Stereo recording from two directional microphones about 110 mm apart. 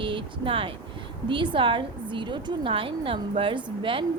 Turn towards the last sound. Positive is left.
turn(degrees=-50)  # may be behind; listen again after turning